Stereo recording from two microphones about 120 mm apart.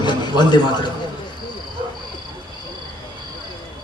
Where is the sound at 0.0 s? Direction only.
40° left (ahead or behind).